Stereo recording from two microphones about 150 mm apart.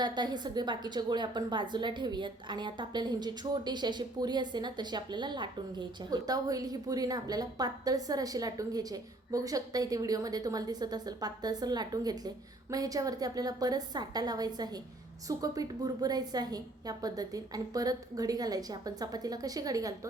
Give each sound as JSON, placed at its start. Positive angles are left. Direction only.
{"t": 0.0, "sound": "a woman's voice", "side_deg": -30}